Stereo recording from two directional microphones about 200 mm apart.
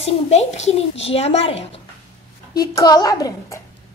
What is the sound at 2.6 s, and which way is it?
A woman's voice, 20° left (ahead or behind).